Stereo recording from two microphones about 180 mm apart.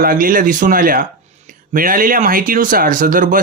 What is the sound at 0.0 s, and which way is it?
Speech, 50° right (ahead or behind).